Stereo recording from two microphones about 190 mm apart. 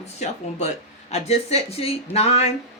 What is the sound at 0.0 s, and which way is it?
Speech, 35° left (ahead or behind).